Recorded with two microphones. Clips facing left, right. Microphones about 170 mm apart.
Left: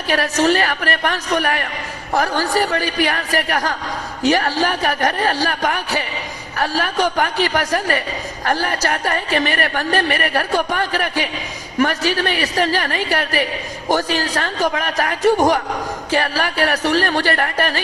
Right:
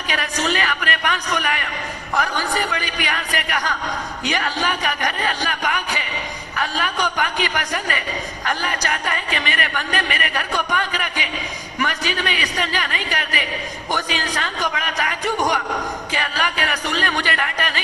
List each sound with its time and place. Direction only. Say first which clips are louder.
0.1 s a woman's voice: left 7 dB; 40° left (ahead or behind)